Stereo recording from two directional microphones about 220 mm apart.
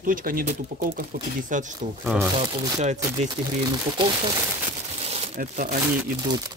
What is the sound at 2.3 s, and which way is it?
Speech, 20° right (ahead or behind).